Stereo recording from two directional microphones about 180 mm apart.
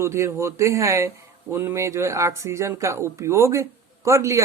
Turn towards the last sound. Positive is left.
turn(degrees=-15)  # may be behind; listen again after turning